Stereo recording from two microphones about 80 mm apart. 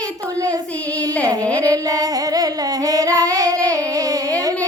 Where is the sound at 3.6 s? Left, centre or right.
Right.